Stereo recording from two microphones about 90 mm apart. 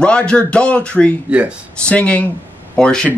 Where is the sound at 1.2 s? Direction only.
15° right (ahead or behind).